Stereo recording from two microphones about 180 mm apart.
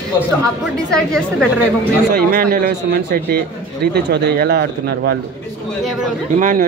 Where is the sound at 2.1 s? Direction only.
55° right (ahead or behind).